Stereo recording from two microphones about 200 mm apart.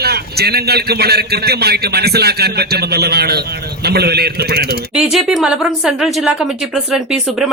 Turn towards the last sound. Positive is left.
turn(degrees=-5)  # may be behind; listen again after turning